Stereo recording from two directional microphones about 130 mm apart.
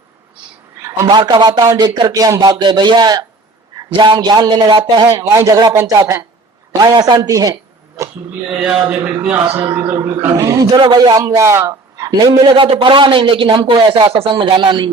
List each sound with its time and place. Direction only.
0.8 s a sound: 20° right (ahead or behind)
1.0 s a man's voice: 35° right (ahead or behind)
8.4 s a man's voice: 10° right (ahead or behind)
8.8 s a man's voice: 20° right (ahead or behind); by 14.8 s 35° right (ahead or behind)